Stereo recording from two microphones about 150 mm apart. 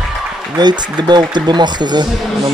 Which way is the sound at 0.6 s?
30° right (ahead or behind).